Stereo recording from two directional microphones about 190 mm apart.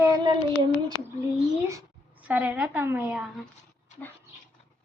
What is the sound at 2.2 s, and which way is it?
Speech, 10° right (ahead or behind).